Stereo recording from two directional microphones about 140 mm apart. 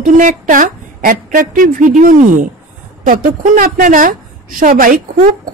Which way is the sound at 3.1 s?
80° right.